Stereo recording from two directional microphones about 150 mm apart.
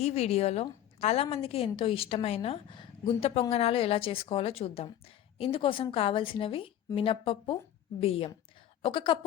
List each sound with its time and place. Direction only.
0.0 s a woman's voice: 45° left (ahead or behind)